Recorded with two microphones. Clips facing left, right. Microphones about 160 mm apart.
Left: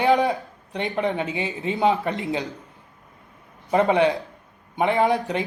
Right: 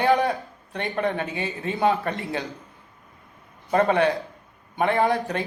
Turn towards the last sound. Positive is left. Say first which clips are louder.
# left 1 dB
turn(degrees=20)  # may be behind; listen again after turning